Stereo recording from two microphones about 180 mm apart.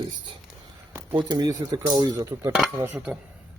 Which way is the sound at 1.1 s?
25° right (ahead or behind).